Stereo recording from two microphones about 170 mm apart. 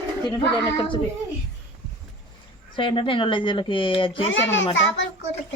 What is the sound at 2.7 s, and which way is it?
Speech, 30° left (ahead or behind).